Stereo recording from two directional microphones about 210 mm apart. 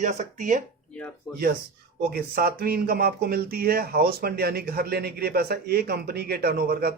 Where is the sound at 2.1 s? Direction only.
45° right (ahead or behind).